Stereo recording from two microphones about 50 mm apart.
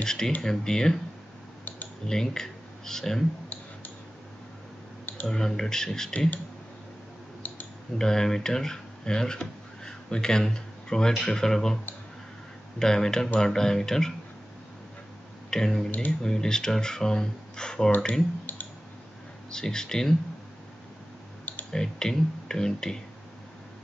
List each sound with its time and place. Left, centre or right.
0.0 s speech: centre
2.0 s speech: centre
5.2 s speech: centre
7.4 s a sound: left
8.0 s speech: centre
15.5 s speech: centre
19.5 s speech: centre
21.6 s speech: centre